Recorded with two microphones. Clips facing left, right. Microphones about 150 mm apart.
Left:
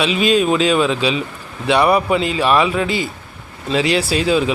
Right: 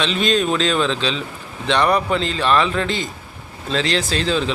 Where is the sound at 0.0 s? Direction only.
10° left (ahead or behind).